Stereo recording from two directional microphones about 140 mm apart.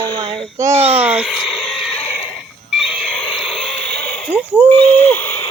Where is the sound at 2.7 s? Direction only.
5° left (ahead or behind).